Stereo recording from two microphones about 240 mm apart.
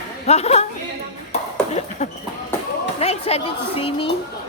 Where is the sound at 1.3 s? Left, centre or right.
Left.